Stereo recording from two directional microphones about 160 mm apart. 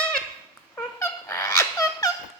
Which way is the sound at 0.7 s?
20° left (ahead or behind).